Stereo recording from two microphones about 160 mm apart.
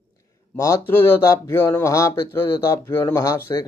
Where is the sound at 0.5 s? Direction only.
20° left (ahead or behind).